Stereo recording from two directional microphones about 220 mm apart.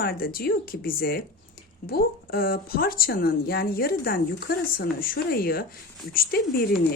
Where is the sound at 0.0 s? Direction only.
45° left (ahead or behind).